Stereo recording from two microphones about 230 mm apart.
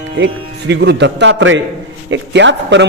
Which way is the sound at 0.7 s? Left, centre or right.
Right.